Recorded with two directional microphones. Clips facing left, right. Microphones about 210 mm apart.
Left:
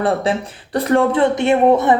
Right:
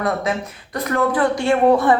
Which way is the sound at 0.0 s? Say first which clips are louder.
Left 4 dB; 30° left (ahead or behind).